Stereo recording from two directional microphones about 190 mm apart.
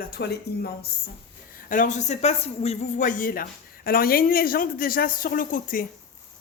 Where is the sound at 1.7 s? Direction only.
45° left (ahead or behind).